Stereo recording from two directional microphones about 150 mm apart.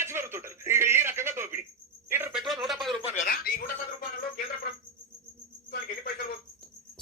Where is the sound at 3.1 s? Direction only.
75° left (ahead or behind).